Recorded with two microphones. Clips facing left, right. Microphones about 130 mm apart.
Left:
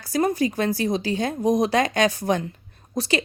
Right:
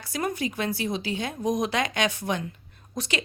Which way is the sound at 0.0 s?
35° left (ahead or behind).